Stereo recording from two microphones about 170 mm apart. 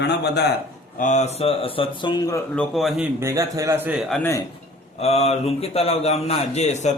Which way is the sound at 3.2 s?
20° right (ahead or behind).